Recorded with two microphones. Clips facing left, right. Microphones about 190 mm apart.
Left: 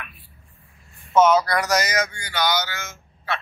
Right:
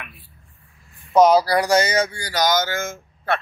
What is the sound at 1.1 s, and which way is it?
Speech, 35° right (ahead or behind).